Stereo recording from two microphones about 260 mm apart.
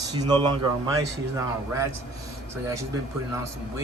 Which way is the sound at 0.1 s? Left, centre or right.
Centre.